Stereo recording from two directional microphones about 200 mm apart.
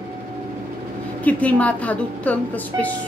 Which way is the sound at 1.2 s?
5° left (ahead or behind).